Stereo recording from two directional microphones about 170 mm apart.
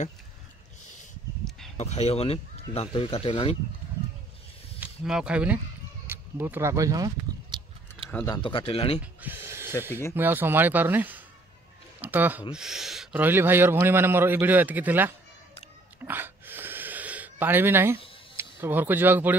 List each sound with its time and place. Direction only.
1.8 s speech: 40° left (ahead or behind)
4.7 s speech: 5° right (ahead or behind)
8.3 s speech: 30° left (ahead or behind)
9.0 s a man's voice: 10° right (ahead or behind)
16.1 s gasp: 10° right (ahead or behind)
18.3 s speech: 15° right (ahead or behind)